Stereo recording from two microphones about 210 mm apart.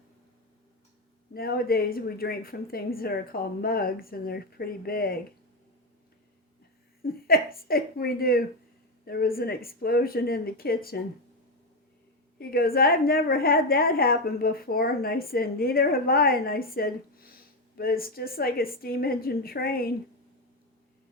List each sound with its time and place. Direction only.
1.3 s a woman's voice: 45° left (ahead or behind)
7.0 s a woman's voice: 45° left (ahead or behind)
12.4 s a woman's voice: 45° left (ahead or behind)